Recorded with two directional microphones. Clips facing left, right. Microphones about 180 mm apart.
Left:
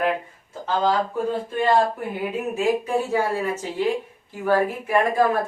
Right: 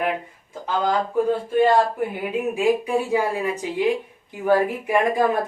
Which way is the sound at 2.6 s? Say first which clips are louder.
Right 1 dB; 15° right (ahead or behind).